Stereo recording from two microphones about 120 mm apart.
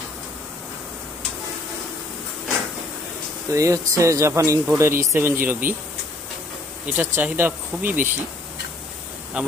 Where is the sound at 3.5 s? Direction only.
25° right (ahead or behind).